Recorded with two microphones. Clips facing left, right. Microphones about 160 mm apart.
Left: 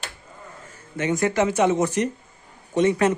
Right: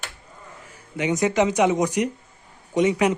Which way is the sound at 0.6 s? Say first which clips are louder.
Even; 15° right (ahead or behind).